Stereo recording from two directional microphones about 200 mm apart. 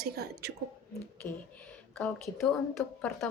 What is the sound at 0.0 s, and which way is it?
Speech, 55° right (ahead or behind).